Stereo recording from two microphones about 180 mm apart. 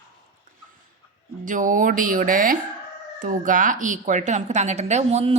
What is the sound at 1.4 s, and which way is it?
A woman's voice, 45° right (ahead or behind).